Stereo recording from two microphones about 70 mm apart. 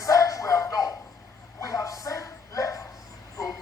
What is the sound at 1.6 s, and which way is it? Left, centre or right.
Bow-wow, left.